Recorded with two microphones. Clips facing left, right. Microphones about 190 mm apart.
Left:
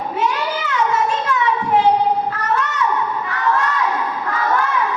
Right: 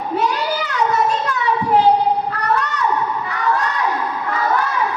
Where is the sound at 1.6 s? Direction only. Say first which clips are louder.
Right 2 dB; 35° right (ahead or behind).